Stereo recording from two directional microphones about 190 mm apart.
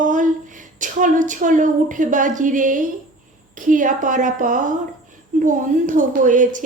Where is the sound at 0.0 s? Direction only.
45° right (ahead or behind).